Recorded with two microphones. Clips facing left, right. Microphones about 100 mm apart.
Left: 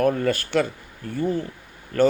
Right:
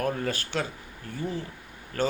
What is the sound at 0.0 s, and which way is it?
Speech, 60° left (ahead or behind).